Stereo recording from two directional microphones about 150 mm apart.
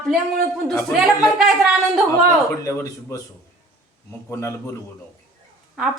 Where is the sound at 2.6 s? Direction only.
20° left (ahead or behind).